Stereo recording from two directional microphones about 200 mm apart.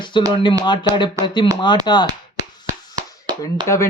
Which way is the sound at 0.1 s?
25° left (ahead or behind).